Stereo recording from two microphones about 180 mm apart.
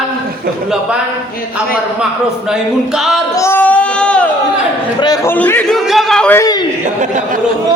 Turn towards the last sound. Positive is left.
turn(degrees=5)  # may be behind; listen again after turning